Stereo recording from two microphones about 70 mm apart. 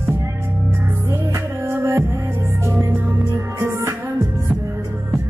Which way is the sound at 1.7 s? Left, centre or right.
Right.